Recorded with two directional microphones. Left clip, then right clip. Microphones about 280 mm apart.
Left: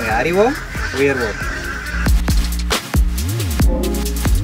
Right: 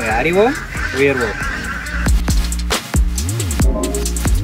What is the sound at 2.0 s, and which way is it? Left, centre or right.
Music, centre.